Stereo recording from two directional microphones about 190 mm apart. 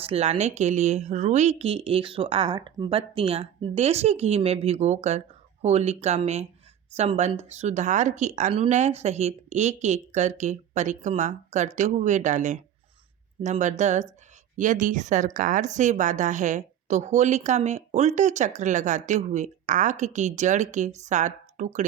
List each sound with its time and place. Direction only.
0.0 s a woman's voice: 35° right (ahead or behind)